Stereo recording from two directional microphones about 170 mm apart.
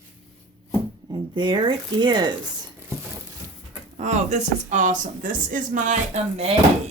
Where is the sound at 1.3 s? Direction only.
25° right (ahead or behind).